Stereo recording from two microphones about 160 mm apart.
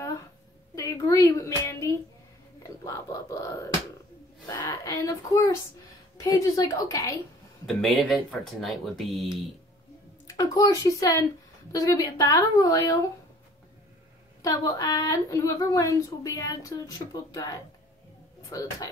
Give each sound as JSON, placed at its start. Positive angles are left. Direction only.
{"t": 0.7, "sound": "a child's voice", "side_deg": 20}
{"t": 7.6, "sound": "speech", "side_deg": 0}
{"t": 10.2, "sound": "a woman's voice", "side_deg": 20}
{"t": 14.4, "sound": "a woman's voice", "side_deg": 20}